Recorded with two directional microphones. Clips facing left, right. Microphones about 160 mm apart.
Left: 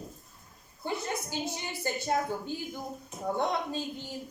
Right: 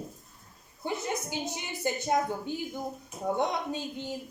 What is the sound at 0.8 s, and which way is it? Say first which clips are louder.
A woman's voice: right 1 dB; 15° right (ahead or behind).